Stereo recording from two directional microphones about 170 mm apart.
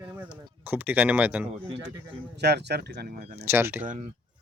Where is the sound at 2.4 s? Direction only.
75° right (ahead or behind).